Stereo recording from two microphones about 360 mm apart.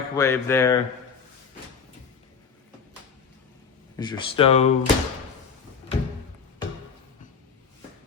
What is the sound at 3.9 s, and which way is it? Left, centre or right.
Speech, centre.